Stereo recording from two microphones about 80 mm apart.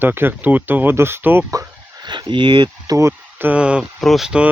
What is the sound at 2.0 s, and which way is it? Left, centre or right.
Speech, right.